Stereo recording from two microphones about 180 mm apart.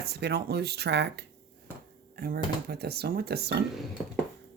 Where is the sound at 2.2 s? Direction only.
60° right (ahead or behind).